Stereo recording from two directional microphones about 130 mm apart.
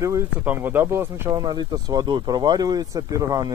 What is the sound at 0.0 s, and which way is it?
Speech, 20° right (ahead or behind).